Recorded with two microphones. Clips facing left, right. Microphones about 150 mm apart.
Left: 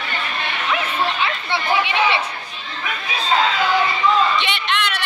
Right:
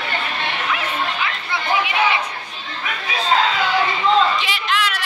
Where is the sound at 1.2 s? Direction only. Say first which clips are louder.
Left 2 dB; 30° left (ahead or behind).